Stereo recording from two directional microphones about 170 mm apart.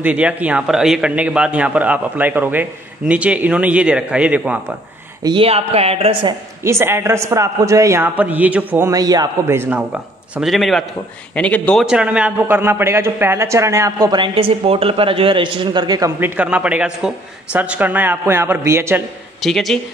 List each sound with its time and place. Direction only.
0.0 s a man's voice: 10° right (ahead or behind)
5.2 s speech: 30° right (ahead or behind)
6.6 s a man's voice: 15° right (ahead or behind); by 11.8 s 5° left (ahead or behind)
11.8 s a man's voice: 5° right (ahead or behind); by 16.1 s 25° right (ahead or behind)
16.2 s a man's voice: 10° right (ahead or behind)
19.4 s speech: centre (ahead or behind)